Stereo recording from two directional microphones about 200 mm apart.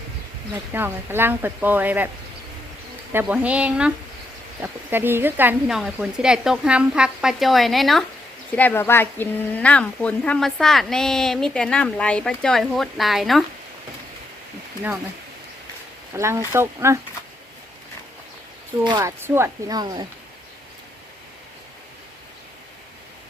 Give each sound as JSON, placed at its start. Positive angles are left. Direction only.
{"t": 0.7, "sound": "speech", "side_deg": -10}
{"t": 3.1, "sound": "speech", "side_deg": -10}
{"t": 16.1, "sound": "speech", "side_deg": -15}
{"t": 18.9, "sound": "speech", "side_deg": -15}